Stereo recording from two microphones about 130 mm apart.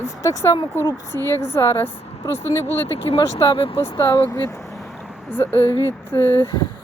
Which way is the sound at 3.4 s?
40° left (ahead or behind).